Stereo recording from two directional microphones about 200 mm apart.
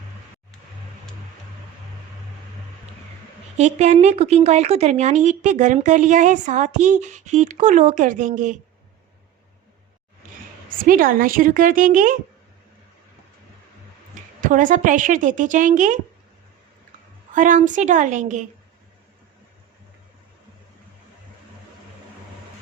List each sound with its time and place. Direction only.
3.6 s speech: 35° right (ahead or behind)
10.8 s a woman's voice: 45° right (ahead or behind)
14.4 s speech: 40° right (ahead or behind)
17.3 s speech: 40° right (ahead or behind)